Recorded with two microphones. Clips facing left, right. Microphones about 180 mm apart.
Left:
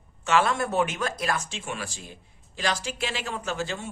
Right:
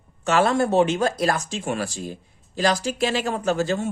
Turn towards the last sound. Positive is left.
turn(degrees=-45)  # may be behind; listen again after turning